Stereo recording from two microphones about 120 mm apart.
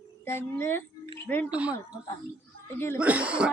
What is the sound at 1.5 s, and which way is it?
Speech, 10° right (ahead or behind).